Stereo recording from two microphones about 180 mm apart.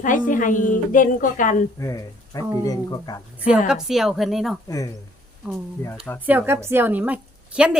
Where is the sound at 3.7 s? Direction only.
Centre (ahead or behind).